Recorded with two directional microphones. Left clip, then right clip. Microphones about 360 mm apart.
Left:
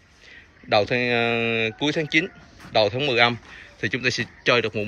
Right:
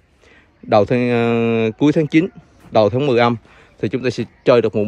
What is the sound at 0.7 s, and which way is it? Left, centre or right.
Speech, centre.